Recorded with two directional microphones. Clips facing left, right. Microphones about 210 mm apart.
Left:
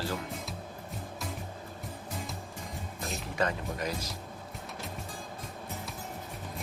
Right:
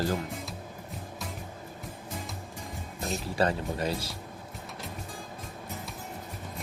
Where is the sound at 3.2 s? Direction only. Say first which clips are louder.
Right 4 dB; 30° right (ahead or behind).